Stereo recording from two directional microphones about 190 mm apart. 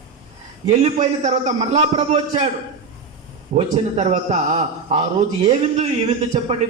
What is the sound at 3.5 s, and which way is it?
A man's voice, 35° right (ahead or behind).